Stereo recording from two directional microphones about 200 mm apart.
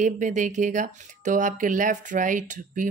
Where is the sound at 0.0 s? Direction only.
40° right (ahead or behind).